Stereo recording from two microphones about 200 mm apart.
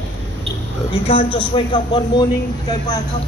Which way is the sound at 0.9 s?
25° left (ahead or behind).